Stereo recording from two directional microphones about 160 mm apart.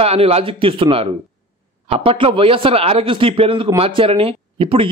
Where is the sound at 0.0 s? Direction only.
40° right (ahead or behind).